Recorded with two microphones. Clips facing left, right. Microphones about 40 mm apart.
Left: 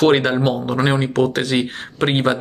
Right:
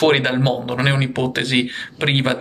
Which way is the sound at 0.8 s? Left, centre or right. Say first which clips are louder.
Left 4 dB; right.